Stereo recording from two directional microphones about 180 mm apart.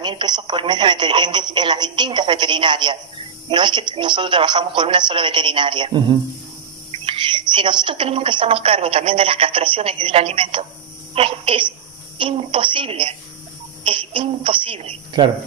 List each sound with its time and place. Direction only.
0.0 s a woman's voice: 25° right (ahead or behind)